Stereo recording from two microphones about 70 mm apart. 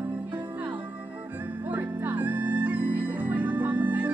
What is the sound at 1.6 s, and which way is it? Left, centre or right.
Music, right.